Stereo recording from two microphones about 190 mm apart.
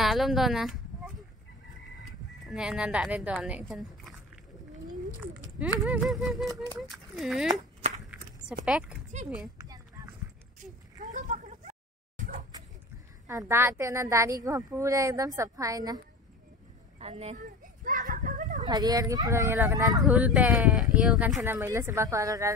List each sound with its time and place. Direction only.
0.0 s a sound: centre (ahead or behind)
2.4 s speech: 5° right (ahead or behind)
5.8 s speech: centre (ahead or behind)
8.6 s speech: 5° right (ahead or behind)
10.6 s a sound: 40° right (ahead or behind)
13.3 s a woman's voice: 15° right (ahead or behind)
17.0 s a child's voice: 35° right (ahead or behind)
17.8 s children playing: 45° right (ahead or behind)
18.6 s speech: 20° right (ahead or behind)
20.1 s a woman's voice: 5° right (ahead or behind)